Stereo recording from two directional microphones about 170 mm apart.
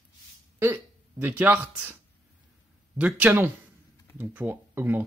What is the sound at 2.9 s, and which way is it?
Speech, 10° right (ahead or behind).